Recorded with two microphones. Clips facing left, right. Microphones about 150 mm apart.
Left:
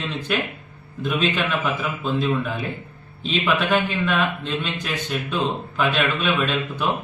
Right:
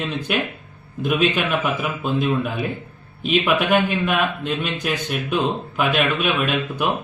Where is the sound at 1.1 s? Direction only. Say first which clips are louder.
Right 3 dB; 10° right (ahead or behind).